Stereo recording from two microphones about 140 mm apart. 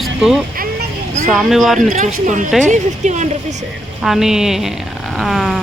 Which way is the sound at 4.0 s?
5° right (ahead or behind).